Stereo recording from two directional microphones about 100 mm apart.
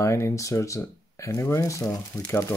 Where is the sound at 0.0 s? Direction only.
30° left (ahead or behind).